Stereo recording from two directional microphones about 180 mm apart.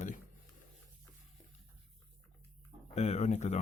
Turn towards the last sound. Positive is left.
turn(degrees=40)  # may be behind; listen again after turning